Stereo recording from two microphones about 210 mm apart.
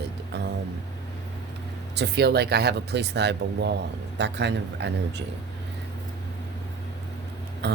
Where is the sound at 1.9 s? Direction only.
50° right (ahead or behind).